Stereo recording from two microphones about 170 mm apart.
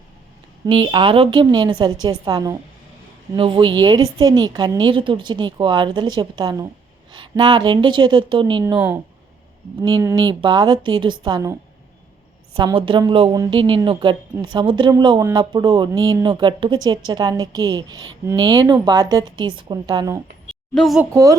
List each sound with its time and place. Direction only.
0.6 s a woman's voice: 30° right (ahead or behind)
10.0 s a woman's voice: 20° right (ahead or behind)
12.5 s a woman's voice: 30° right (ahead or behind)
20.5 s a sound: centre (ahead or behind)
21.1 s a woman's voice: 20° right (ahead or behind)